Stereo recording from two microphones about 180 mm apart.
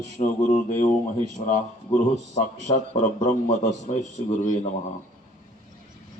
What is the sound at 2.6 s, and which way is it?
A man's voice, 40° left (ahead or behind).